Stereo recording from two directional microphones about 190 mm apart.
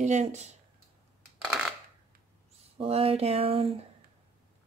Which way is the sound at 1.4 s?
Centre (ahead or behind).